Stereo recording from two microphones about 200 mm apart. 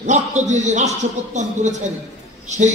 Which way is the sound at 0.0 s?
35° right (ahead or behind).